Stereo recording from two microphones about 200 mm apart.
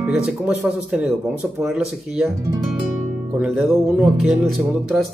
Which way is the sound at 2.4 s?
15° right (ahead or behind).